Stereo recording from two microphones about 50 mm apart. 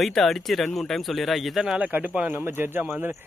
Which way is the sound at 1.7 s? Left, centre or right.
Right.